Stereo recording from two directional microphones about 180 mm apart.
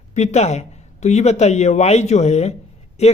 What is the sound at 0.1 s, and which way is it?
A man's voice, 40° left (ahead or behind).